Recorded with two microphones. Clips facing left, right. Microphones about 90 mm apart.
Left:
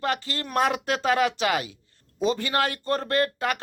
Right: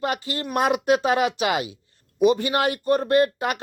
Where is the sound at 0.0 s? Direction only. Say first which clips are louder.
Right 2 dB; 20° right (ahead or behind).